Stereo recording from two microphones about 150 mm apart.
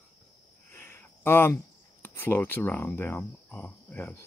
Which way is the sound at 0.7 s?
15° left (ahead or behind).